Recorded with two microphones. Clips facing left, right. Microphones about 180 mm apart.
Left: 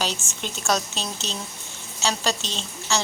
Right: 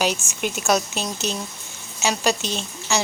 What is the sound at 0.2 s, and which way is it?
Speech, centre (ahead or behind).